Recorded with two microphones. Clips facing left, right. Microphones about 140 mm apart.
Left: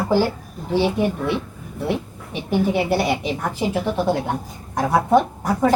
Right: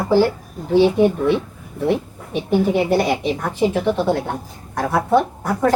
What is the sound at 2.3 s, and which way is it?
A woman's voice, 5° left (ahead or behind).